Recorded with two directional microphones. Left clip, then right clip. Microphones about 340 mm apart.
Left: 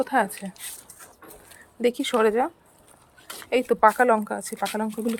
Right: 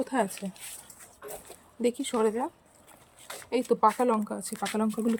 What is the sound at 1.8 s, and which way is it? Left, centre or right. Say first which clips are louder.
Speech: left 6 dB; centre.